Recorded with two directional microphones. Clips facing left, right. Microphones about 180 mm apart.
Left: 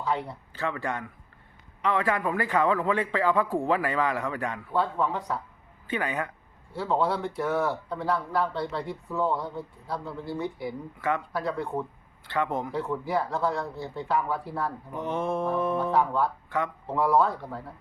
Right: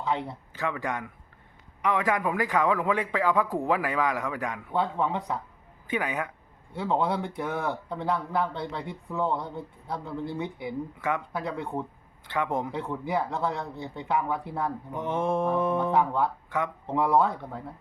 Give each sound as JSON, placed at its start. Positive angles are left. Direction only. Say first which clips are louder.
{"t": 0.0, "sound": "a man's voice", "louder": "even", "side_deg": -20}
{"t": 4.7, "sound": "a man's voice", "louder": "even", "side_deg": -20}